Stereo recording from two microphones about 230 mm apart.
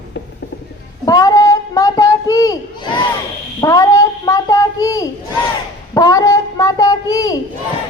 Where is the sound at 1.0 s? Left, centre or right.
Centre.